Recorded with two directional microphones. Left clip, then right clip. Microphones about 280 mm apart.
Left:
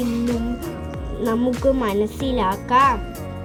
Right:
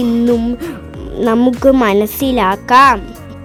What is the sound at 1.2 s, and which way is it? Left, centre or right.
Speech, right.